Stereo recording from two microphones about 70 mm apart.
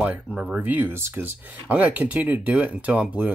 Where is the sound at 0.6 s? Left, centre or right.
Right.